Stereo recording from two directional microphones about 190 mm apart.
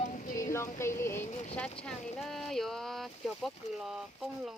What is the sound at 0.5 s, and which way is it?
Speech, 15° left (ahead or behind).